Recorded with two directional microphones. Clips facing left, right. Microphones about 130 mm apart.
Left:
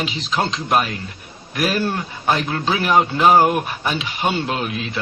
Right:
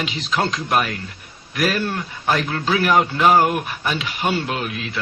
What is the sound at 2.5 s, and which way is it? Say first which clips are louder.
A man's voice: right 1 dB; 25° left (ahead or behind).